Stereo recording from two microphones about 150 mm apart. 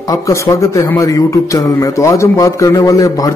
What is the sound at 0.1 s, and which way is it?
Speech, 20° left (ahead or behind).